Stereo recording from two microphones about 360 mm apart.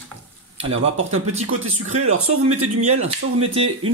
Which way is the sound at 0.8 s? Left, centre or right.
Right.